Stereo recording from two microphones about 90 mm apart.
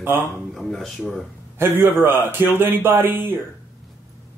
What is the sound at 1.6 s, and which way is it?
A man's voice, 25° right (ahead or behind).